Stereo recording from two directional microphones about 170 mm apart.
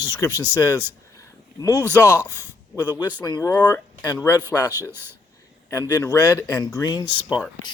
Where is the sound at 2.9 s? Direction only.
25° left (ahead or behind).